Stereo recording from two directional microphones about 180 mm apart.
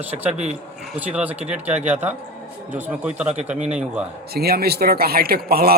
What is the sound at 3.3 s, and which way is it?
Speech, 40° right (ahead or behind).